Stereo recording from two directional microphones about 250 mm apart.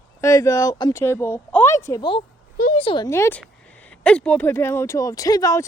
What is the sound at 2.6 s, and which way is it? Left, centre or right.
Speech, left.